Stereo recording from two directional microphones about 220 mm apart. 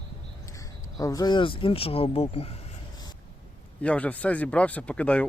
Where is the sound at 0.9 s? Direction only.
15° left (ahead or behind).